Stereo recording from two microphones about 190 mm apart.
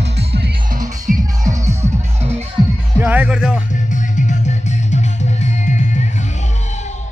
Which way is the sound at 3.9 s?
40° left (ahead or behind).